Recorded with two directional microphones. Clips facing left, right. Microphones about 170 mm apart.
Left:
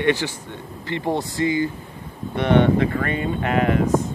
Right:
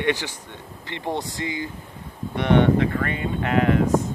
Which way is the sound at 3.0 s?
5° left (ahead or behind).